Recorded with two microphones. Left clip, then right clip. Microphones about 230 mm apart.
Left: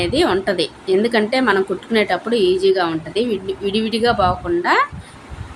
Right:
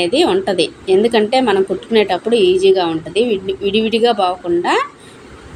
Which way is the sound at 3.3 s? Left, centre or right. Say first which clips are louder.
Right 4 dB; centre.